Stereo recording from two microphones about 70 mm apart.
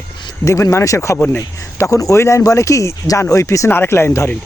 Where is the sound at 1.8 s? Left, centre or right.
Left.